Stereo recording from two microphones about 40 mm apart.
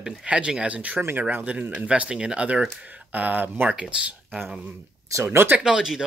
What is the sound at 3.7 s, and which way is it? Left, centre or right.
Speech, right.